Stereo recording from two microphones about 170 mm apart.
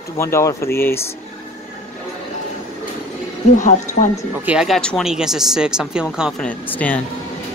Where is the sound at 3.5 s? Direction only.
50° left (ahead or behind).